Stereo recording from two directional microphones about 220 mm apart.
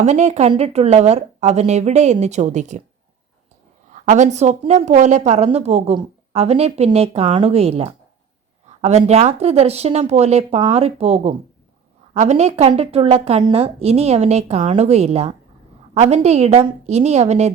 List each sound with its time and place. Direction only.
0.0 s a woman's voice: 30° right (ahead or behind)
3.9 s a woman's voice: 35° right (ahead or behind)